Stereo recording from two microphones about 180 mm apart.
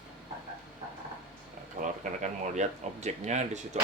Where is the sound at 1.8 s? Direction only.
45° right (ahead or behind).